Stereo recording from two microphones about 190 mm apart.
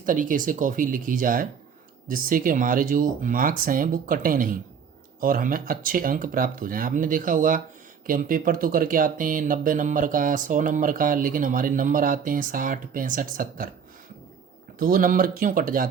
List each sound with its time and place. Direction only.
0.0 s speech: 45° right (ahead or behind)
14.8 s speech: 50° right (ahead or behind)